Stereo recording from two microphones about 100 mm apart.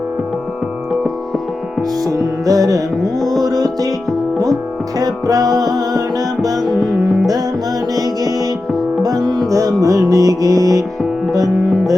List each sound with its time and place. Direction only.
2.0 s music: 35° right (ahead or behind)
4.9 s music: 40° right (ahead or behind)